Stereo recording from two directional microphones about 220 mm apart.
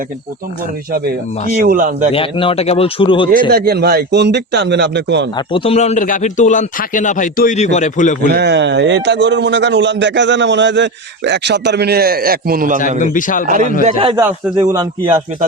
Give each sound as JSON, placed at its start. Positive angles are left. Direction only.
{"t": 1.6, "sound": "a man's voice", "side_deg": -40}
{"t": 2.1, "sound": "a man's voice", "side_deg": 25}
{"t": 3.5, "sound": "a man's voice", "side_deg": -45}
{"t": 5.5, "sound": "a man's voice", "side_deg": 25}
{"t": 8.3, "sound": "a man's voice", "side_deg": -50}
{"t": 13.0, "sound": "a man's voice", "side_deg": 35}
{"t": 13.5, "sound": "a man's voice", "side_deg": -35}
{"t": 13.8, "sound": "a man's voice", "side_deg": -20}